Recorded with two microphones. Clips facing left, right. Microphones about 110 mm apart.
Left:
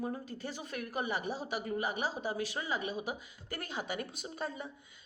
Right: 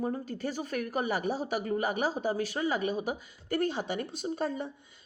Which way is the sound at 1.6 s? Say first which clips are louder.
Right 5 dB; 50° right (ahead or behind).